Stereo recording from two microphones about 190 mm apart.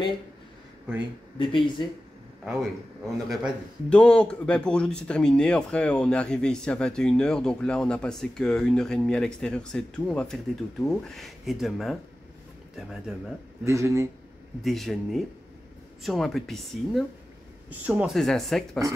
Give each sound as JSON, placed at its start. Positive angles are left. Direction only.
{"t": 1.4, "sound": "speech", "side_deg": 25}
{"t": 3.3, "sound": "speech", "side_deg": 0}
{"t": 13.7, "sound": "speech", "side_deg": -15}
{"t": 14.6, "sound": "speech", "side_deg": 0}